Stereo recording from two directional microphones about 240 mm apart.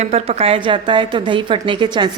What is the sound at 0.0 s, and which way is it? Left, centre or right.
A woman's voice, right.